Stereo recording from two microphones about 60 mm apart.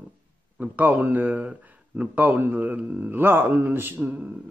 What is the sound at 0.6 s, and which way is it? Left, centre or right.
Speech, right.